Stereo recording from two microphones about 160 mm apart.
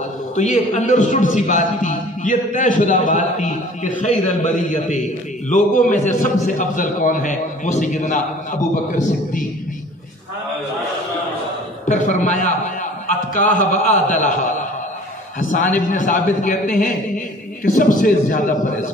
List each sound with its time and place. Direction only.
0.4 s a man's voice: 50° left (ahead or behind)
11.9 s a man's voice: 50° left (ahead or behind)